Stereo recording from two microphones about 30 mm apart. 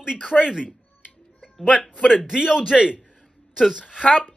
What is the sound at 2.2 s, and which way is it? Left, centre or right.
A woman's voice, right.